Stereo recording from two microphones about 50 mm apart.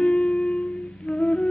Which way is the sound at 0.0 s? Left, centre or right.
Centre.